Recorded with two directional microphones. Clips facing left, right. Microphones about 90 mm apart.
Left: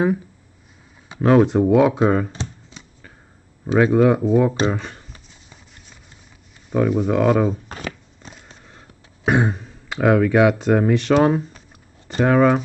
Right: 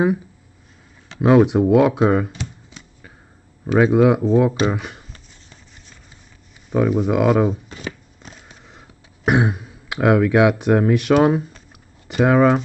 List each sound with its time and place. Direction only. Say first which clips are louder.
1.2 s speech: right 1 dB; 10° right (ahead or behind)
3.7 s speech: right 1 dB; 10° right (ahead or behind)
4.2 s speech: right 1 dB; centre (ahead or behind)
4.6 s speech: even; 10° right (ahead or behind)
5.1 s a sound: even; 10° left (ahead or behind)
6.7 s speech: right 1 dB; 5° right (ahead or behind)
7.6 s shuffling cards: left 1 dB; 60° left (ahead or behind)
8.2 s a sound: even; centre (ahead or behind)
8.6 s throat clearing: right 1 dB; 15° right (ahead or behind)
10.9 s speech: right 1 dB; 10° right (ahead or behind)